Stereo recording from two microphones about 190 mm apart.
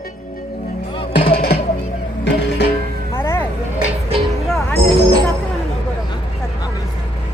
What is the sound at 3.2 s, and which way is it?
Vehicle, 10° left (ahead or behind).